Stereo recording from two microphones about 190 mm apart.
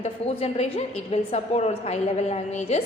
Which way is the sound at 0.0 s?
35° left (ahead or behind).